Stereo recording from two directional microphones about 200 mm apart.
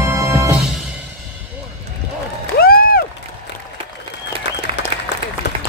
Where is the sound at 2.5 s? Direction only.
50° left (ahead or behind).